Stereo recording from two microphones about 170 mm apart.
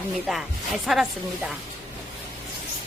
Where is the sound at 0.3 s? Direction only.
Centre (ahead or behind).